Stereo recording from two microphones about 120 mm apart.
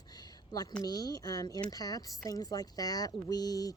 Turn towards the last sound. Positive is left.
turn(degrees=30)  # may be behind; listen again after turning